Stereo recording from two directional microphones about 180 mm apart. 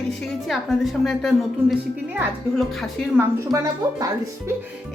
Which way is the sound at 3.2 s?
20° right (ahead or behind).